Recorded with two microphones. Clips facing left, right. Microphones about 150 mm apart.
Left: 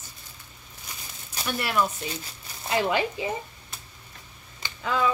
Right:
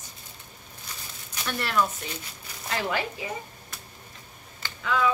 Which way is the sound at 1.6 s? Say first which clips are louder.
Even; 10° left (ahead or behind).